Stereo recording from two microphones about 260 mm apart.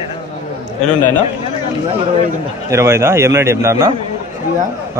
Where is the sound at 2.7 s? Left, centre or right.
Centre.